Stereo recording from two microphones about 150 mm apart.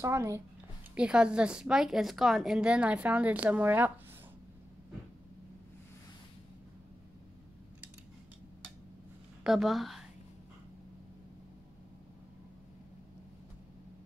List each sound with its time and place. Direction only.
0.0 s a child's voice: 20° right (ahead or behind)
0.9 s a woman's voice: 5° right (ahead or behind)
9.4 s a woman's voice: centre (ahead or behind)